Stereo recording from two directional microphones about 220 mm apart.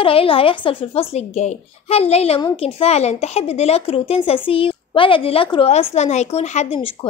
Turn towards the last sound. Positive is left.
turn(degrees=25)  # may be behind; listen again after turning